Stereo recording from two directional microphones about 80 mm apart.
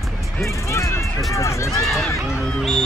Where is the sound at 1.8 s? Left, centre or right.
Centre.